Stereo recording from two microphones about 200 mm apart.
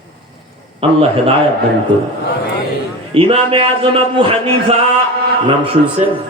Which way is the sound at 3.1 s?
25° right (ahead or behind).